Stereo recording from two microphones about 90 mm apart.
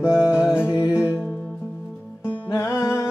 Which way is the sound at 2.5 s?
35° left (ahead or behind).